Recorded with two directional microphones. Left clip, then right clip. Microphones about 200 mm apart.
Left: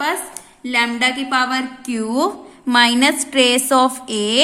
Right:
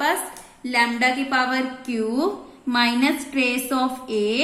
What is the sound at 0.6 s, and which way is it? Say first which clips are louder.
A woman's voice: left 3 dB; 20° left (ahead or behind).